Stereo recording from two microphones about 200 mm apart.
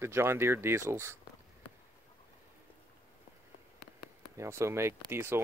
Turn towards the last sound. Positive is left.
turn(degrees=-10)  # may be behind; listen again after turning